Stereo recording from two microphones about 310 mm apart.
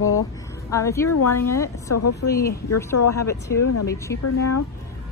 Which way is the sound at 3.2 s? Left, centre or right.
Centre.